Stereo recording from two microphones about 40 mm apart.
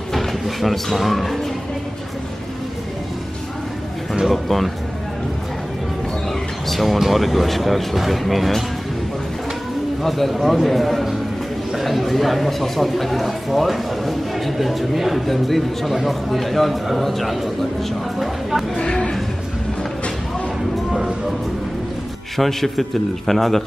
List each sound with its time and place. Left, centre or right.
0.1 s speech: centre
4.3 s a man's voice: centre
6.7 s a man's voice: centre
10.0 s a man's voice: centre
18.8 s a sound: left
22.4 s a man's voice: centre